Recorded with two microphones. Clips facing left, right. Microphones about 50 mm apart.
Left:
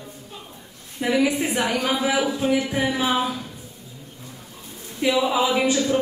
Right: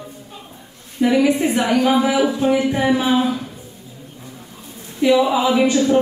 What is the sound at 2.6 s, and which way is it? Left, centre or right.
Speech, right.